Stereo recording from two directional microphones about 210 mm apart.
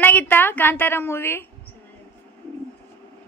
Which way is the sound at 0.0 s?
10° left (ahead or behind).